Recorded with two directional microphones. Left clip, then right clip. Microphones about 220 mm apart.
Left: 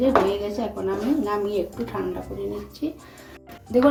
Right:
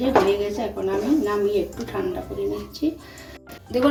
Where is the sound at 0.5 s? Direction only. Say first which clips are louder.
Right 2 dB; 45° left (ahead or behind).